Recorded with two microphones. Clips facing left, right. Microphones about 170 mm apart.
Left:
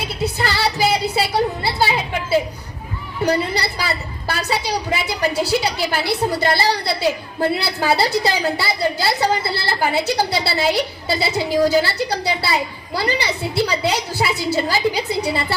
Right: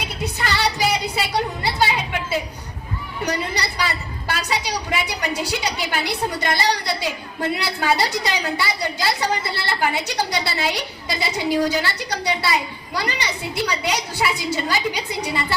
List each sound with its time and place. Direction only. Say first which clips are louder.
0.3 s music: even; 30° left (ahead or behind)
3.2 s a woman's voice: left 6 dB; 30° left (ahead or behind)